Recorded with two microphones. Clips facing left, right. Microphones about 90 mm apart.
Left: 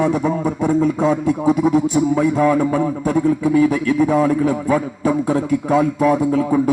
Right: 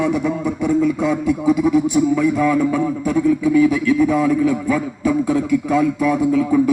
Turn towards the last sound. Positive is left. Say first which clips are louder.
# right 1 dB
turn(degrees=35)  # may be behind; listen again after turning